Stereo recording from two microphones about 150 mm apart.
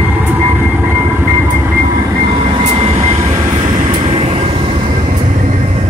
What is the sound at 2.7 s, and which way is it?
Train, 40° right (ahead or behind).